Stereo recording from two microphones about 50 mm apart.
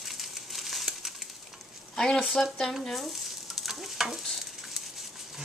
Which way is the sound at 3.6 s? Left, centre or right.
Centre.